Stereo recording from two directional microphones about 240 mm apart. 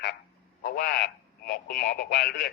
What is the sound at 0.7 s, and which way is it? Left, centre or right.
Speech, left.